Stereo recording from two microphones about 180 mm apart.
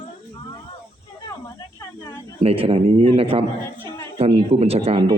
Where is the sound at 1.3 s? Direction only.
20° left (ahead or behind).